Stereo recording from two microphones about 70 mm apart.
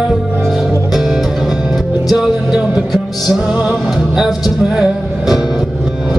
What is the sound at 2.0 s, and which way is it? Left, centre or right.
Music, centre.